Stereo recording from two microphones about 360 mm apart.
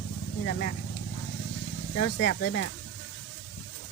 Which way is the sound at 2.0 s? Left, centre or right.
Left.